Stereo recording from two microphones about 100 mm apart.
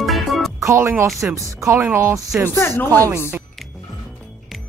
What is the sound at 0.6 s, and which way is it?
Speech, 30° right (ahead or behind).